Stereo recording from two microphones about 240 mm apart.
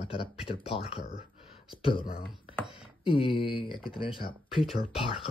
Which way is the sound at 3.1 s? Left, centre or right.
Left.